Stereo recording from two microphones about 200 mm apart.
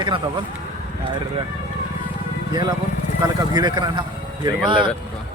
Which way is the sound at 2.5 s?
20° right (ahead or behind).